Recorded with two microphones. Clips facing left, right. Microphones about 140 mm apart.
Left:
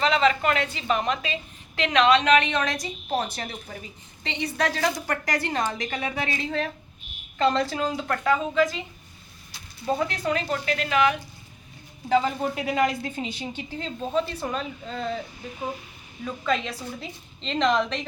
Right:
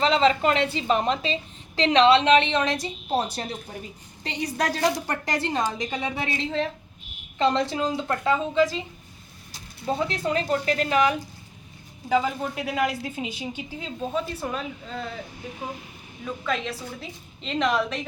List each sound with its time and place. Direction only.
0.0 s a woman's voice: 25° right (ahead or behind)
10.1 s speech: 30° right (ahead or behind)
12.0 s a woman's voice: 5° right (ahead or behind)
16.2 s a woman's voice: centre (ahead or behind)